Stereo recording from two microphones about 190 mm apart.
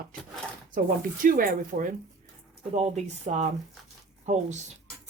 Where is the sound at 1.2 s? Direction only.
50° right (ahead or behind).